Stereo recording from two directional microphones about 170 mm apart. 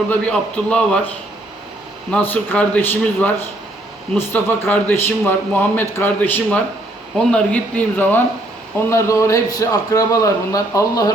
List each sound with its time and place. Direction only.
0.1 s a man's voice: 5° left (ahead or behind)
2.0 s a man's voice: 10° left (ahead or behind)